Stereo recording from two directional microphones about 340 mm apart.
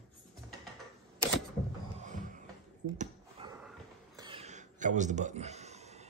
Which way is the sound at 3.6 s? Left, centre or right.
Centre.